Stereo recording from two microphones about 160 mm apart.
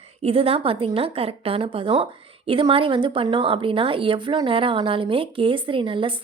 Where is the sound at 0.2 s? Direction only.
35° right (ahead or behind).